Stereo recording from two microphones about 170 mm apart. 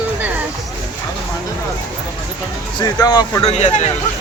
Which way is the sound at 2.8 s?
20° left (ahead or behind).